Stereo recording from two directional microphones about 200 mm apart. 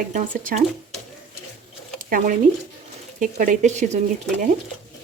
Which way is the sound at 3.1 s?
40° right (ahead or behind).